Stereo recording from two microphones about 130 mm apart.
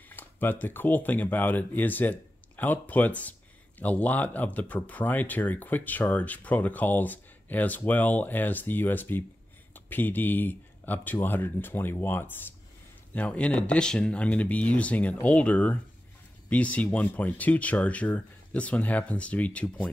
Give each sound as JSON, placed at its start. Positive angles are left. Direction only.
{"t": 0.1, "sound": "speech", "side_deg": 15}